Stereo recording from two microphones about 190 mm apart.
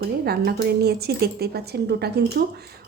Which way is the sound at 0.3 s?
55° right (ahead or behind).